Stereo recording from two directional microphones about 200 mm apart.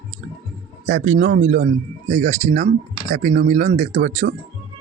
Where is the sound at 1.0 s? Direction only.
50° right (ahead or behind).